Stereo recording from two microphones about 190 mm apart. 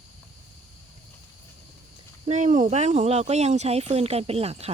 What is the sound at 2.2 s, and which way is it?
Speech, 40° right (ahead or behind).